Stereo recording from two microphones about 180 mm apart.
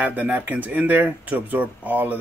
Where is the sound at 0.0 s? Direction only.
10° right (ahead or behind).